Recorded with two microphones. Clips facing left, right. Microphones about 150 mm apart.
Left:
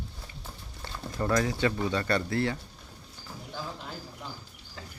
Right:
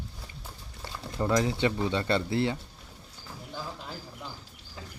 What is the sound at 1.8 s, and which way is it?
Speech, 20° right (ahead or behind).